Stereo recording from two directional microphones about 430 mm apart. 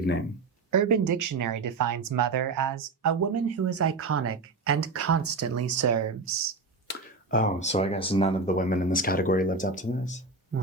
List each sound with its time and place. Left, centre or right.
0.7 s speech: right
6.8 s speech: centre
10.5 s music: right